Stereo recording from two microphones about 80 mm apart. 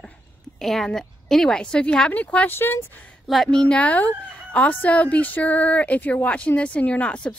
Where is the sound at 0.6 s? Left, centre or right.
Centre; by 2.8 s left.